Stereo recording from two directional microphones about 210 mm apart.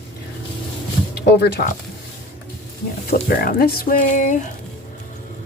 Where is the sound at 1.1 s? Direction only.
50° left (ahead or behind).